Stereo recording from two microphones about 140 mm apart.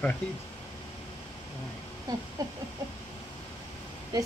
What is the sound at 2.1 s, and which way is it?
Speech, 30° right (ahead or behind).